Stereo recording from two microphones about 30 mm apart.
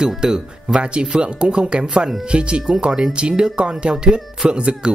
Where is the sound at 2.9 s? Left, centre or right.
Right.